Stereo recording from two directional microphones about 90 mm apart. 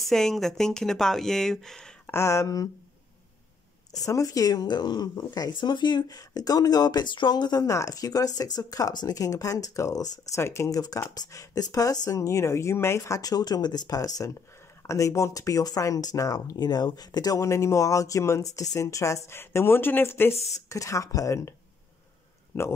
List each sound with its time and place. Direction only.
0.0 s speech: 5° left (ahead or behind)
2.0 s speech: 30° left (ahead or behind)
4.0 s speech: 40° left (ahead or behind)
11.1 s speech: 45° left (ahead or behind); by 22.7 s 25° left (ahead or behind)